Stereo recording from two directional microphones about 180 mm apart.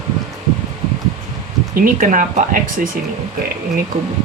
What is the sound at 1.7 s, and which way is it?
Speech, 50° right (ahead or behind).